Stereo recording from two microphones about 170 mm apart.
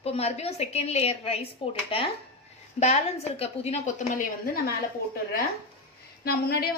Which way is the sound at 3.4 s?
40° left (ahead or behind).